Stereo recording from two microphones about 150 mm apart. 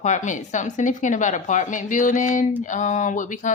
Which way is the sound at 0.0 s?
55° left (ahead or behind).